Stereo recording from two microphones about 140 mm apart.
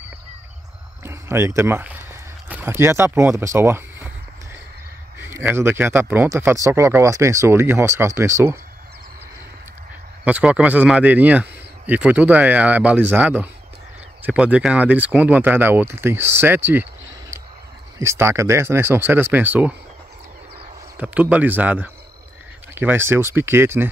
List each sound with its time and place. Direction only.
1.0 s speech: 20° right (ahead or behind)
5.5 s speech: 15° right (ahead or behind)
10.2 s a man's voice: 10° right (ahead or behind)
17.9 s a man's voice: 20° right (ahead or behind)
21.0 s a man's voice: 10° right (ahead or behind)